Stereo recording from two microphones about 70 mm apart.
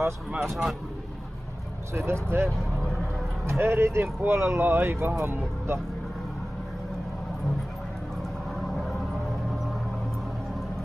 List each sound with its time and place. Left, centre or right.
0.4 s speech: centre
2.0 s speech: right